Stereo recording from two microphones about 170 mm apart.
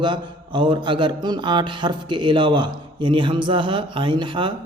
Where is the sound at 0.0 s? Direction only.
25° right (ahead or behind).